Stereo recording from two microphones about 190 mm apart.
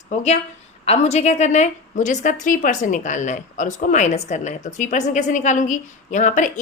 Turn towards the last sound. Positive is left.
turn(degrees=40)  # may be behind; listen again after turning